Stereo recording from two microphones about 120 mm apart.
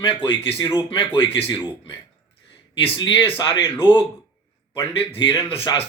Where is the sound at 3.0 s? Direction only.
45° left (ahead or behind).